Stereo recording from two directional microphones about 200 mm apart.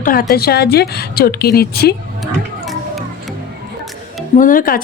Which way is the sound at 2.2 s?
Centre (ahead or behind).